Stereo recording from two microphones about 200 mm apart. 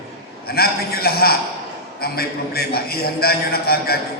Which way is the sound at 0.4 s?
50° left (ahead or behind).